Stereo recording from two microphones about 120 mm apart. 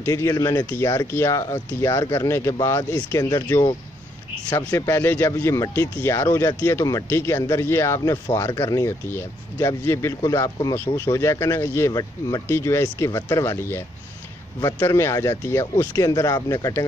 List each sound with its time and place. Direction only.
0.0 s speech: 20° left (ahead or behind)
16.1 s speech: 30° left (ahead or behind)